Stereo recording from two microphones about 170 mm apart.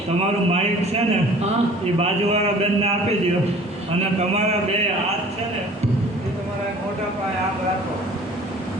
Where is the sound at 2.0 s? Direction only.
40° right (ahead or behind).